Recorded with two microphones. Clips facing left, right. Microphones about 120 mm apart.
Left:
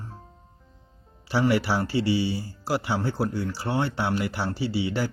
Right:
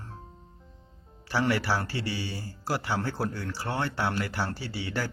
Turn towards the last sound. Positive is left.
turn(degrees=15)  # may be behind; listen again after turning